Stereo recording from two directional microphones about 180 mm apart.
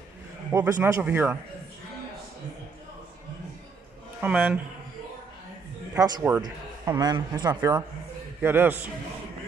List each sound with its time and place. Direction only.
0.5 s a man's voice: 15° right (ahead or behind)
4.2 s a man's voice: 5° right (ahead or behind)
5.9 s a man's voice: 20° right (ahead or behind)
8.4 s a man's voice: 10° right (ahead or behind)